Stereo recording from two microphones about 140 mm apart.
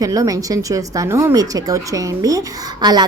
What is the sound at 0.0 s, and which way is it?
Speech, 25° right (ahead or behind).